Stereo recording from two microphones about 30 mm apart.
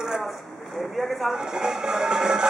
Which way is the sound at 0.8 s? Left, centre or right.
Centre.